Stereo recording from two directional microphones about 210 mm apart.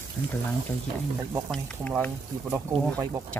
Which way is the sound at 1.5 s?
5° left (ahead or behind).